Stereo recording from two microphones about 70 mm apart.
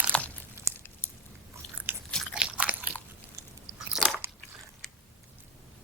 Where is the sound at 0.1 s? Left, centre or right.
Centre.